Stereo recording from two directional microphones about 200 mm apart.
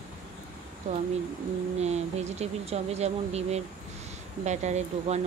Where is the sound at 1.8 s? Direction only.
35° right (ahead or behind).